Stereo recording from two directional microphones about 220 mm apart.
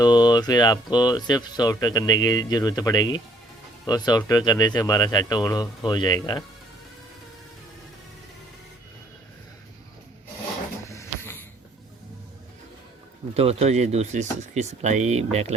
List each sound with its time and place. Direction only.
0.0 s speech: 20° left (ahead or behind)
10.8 s a sound: 15° left (ahead or behind)
13.3 s speech: 30° right (ahead or behind)